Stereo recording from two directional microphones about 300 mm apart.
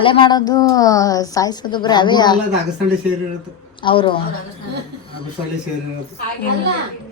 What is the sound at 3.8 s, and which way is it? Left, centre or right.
Speech, centre.